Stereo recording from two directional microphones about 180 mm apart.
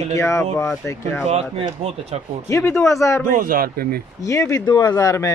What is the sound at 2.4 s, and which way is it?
Speech, 15° left (ahead or behind).